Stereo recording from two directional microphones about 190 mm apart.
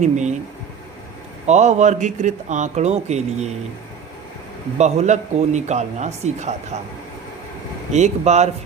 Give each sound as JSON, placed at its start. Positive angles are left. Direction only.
{"t": 0.0, "sound": "speech", "side_deg": -40}
{"t": 1.5, "sound": "speech", "side_deg": -35}
{"t": 4.8, "sound": "speech", "side_deg": -40}
{"t": 7.9, "sound": "speech", "side_deg": -35}